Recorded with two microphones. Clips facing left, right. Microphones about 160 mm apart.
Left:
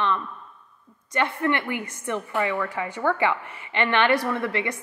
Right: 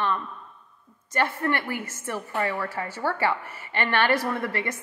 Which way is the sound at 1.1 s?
40° right (ahead or behind).